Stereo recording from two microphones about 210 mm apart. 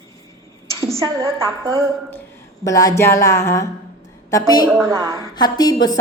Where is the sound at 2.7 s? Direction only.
15° left (ahead or behind).